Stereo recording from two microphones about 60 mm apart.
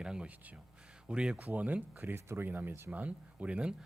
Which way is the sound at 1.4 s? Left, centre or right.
Right.